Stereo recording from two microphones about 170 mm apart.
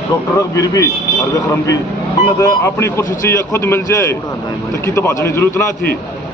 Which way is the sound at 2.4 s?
15° left (ahead or behind).